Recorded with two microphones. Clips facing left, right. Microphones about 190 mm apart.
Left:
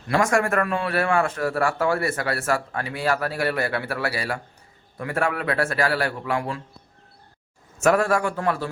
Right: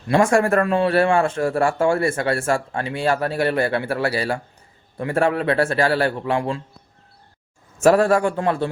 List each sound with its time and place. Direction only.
0.1 s speech: 30° right (ahead or behind)
7.8 s speech: 30° right (ahead or behind)